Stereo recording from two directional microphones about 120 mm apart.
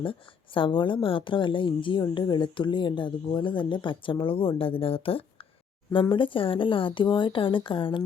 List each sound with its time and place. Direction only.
0.0 s speech: 45° left (ahead or behind)